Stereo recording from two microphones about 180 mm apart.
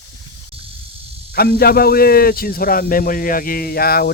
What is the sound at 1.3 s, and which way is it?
A man's voice, 60° left (ahead or behind).